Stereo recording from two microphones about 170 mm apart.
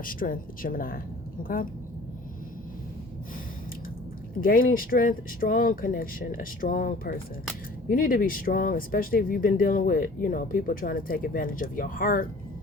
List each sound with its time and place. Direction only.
0.0 s speech: 55° left (ahead or behind)
4.4 s speech: 55° left (ahead or behind)